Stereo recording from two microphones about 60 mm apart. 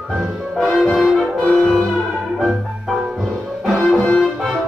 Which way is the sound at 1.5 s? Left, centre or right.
Centre.